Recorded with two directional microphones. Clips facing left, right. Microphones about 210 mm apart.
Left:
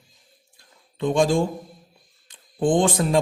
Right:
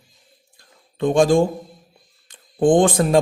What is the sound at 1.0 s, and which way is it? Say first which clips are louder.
Speech: right 4 dB; 50° right (ahead or behind).